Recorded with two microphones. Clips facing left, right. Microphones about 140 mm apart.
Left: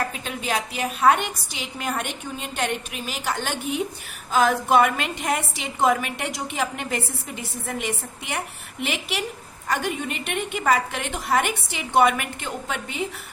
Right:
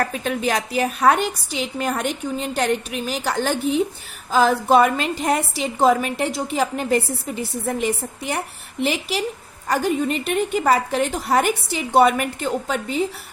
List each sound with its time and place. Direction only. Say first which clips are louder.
0.0 s a woman's voice: right 7 dB; 45° right (ahead or behind)